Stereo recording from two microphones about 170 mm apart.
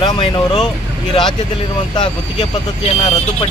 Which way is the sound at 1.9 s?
25° left (ahead or behind).